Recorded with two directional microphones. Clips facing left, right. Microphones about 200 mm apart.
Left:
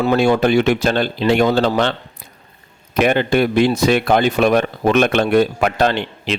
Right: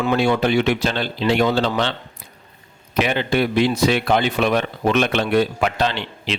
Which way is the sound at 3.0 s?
50° left (ahead or behind).